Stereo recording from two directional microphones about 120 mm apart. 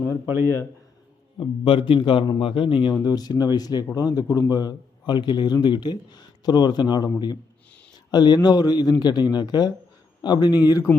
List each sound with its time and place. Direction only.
0.1 s a man's voice: 20° right (ahead or behind)
1.4 s a man's voice: 45° left (ahead or behind)
2.9 s a man's voice: 35° left (ahead or behind)